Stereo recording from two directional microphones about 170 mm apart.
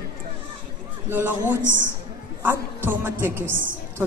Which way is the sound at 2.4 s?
10° right (ahead or behind).